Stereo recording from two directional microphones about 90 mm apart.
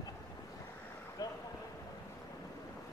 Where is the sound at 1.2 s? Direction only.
45° left (ahead or behind).